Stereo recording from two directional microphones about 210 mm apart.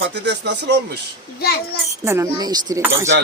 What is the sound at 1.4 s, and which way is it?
Speech, 50° left (ahead or behind).